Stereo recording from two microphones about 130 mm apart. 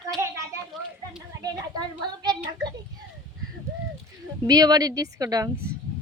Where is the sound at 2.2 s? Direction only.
30° right (ahead or behind).